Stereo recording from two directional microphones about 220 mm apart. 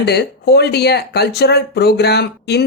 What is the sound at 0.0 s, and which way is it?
Speech, 50° left (ahead or behind).